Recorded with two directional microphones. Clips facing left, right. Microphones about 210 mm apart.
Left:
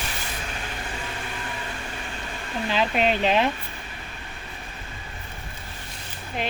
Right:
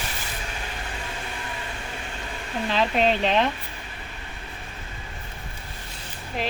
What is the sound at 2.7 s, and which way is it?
Speech, 5° left (ahead or behind).